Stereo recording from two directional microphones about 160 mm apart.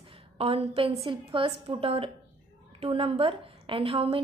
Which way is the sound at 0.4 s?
40° right (ahead or behind).